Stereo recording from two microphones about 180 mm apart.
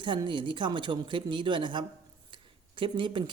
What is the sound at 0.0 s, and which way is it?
Speech, 25° right (ahead or behind).